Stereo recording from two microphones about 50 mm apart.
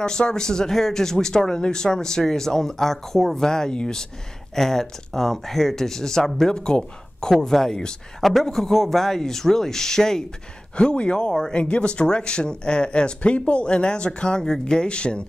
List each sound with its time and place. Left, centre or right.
0.0 s speech: centre